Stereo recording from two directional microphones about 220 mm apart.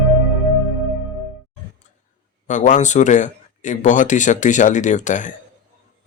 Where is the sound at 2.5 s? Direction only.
35° left (ahead or behind).